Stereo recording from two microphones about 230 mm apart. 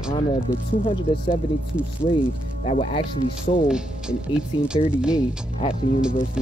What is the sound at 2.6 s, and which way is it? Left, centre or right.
Speech, left.